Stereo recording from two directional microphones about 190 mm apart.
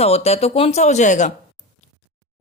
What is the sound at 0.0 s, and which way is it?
A woman's voice, 35° left (ahead or behind).